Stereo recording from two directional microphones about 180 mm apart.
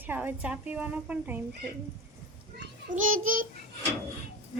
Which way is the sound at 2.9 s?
50° right (ahead or behind).